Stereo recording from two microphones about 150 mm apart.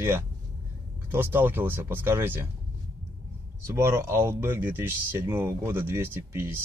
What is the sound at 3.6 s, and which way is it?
A man's voice, 20° right (ahead or behind).